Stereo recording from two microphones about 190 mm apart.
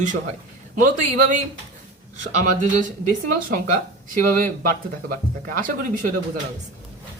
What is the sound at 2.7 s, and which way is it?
Speech, 40° right (ahead or behind).